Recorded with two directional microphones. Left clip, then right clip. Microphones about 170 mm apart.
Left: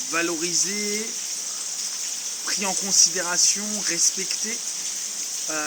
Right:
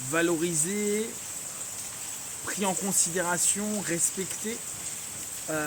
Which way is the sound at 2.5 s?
20° right (ahead or behind).